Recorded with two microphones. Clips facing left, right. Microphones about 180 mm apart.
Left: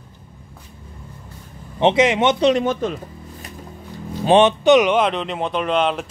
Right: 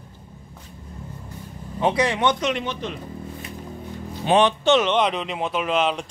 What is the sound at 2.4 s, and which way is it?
Speech, 40° left (ahead or behind).